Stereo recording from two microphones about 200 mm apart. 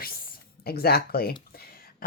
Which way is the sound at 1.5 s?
50° left (ahead or behind).